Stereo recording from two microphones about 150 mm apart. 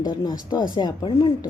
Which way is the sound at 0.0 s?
25° left (ahead or behind).